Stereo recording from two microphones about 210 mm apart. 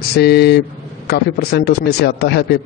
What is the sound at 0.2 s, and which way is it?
Speech, 50° left (ahead or behind).